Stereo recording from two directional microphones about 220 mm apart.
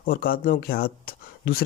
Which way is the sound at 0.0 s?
40° left (ahead or behind).